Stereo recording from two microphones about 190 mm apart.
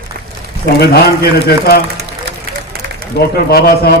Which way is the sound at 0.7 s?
55° left (ahead or behind).